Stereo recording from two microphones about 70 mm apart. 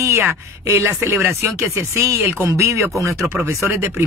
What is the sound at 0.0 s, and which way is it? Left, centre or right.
Speech, right.